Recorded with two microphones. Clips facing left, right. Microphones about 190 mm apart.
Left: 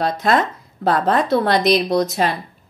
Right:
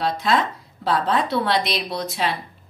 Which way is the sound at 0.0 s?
50° left (ahead or behind).